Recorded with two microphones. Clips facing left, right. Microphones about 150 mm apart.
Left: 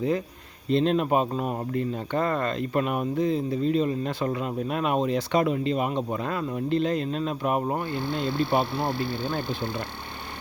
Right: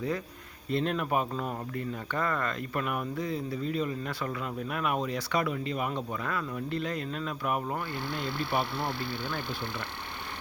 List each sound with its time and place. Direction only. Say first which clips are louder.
0.7 s speech: left 7 dB; 25° left (ahead or behind)